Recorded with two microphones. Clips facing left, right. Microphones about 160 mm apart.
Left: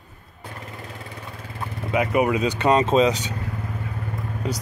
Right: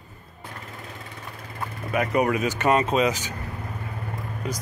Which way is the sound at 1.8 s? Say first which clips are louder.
Left 2 dB; 15° left (ahead or behind).